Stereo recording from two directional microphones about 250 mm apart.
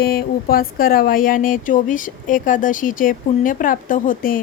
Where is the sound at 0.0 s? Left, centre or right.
Left.